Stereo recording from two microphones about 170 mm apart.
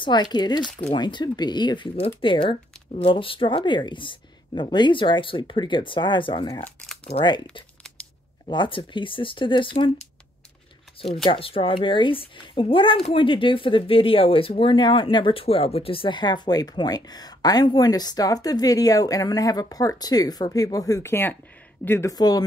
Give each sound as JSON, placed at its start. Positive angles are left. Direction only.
{"t": 0.0, "sound": "a woman's voice", "side_deg": 25}
{"t": 8.5, "sound": "a woman's voice", "side_deg": 30}
{"t": 11.2, "sound": "a woman's voice", "side_deg": 35}